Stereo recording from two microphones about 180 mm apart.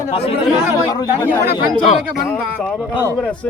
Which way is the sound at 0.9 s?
20° left (ahead or behind).